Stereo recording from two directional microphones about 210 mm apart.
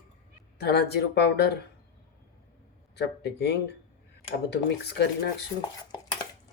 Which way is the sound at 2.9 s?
55° left (ahead or behind).